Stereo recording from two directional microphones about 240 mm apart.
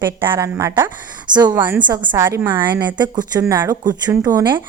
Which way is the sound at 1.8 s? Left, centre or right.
Centre.